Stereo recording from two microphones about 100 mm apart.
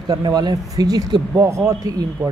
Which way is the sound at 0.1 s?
40° right (ahead or behind).